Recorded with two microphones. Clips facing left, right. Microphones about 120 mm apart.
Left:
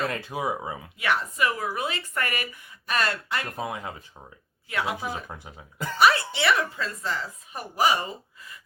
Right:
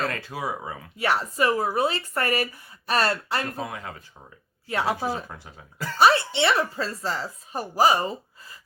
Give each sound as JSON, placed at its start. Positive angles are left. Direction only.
{"t": 0.1, "sound": "speech", "side_deg": 20}
{"t": 0.9, "sound": "speech", "side_deg": -35}
{"t": 3.6, "sound": "speech", "side_deg": 20}
{"t": 4.7, "sound": "speech", "side_deg": -35}
{"t": 5.3, "sound": "speech", "side_deg": 20}
{"t": 6.0, "sound": "speech", "side_deg": -30}